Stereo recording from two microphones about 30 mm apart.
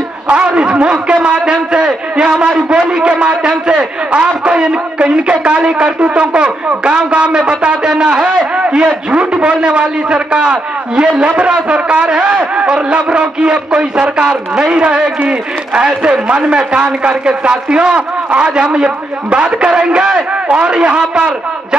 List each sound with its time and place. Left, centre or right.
0.3 s a man's voice: right